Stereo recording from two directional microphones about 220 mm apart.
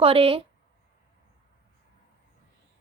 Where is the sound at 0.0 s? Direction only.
25° right (ahead or behind).